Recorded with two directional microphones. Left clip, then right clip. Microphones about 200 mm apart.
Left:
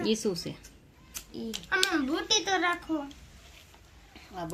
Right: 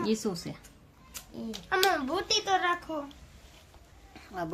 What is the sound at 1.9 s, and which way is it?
Speech, 55° right (ahead or behind).